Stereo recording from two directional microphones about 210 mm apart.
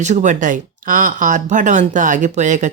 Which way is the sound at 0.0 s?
35° right (ahead or behind).